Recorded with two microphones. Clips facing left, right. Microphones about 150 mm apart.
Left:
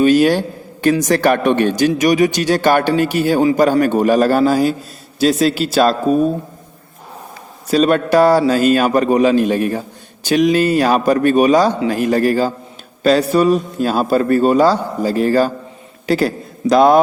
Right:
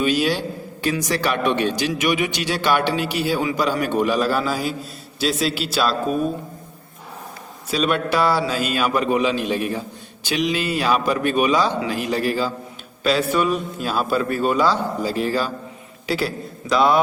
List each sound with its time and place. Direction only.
0.0 s a man's voice: 45° left (ahead or behind)
7.7 s a man's voice: 45° left (ahead or behind)